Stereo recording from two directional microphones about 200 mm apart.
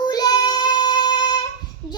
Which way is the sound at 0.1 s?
20° left (ahead or behind).